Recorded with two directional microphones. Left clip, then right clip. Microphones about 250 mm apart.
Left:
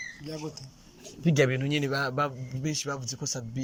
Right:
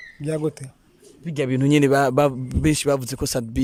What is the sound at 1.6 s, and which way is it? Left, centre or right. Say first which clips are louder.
Speech: right 12 dB; right.